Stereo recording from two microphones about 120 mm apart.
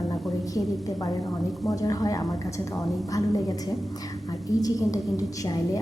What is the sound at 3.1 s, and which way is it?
Speech, 30° left (ahead or behind).